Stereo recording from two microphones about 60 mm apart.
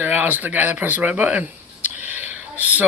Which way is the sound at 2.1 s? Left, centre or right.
Right.